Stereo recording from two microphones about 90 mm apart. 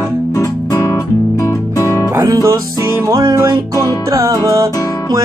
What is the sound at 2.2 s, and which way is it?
Music, 40° right (ahead or behind).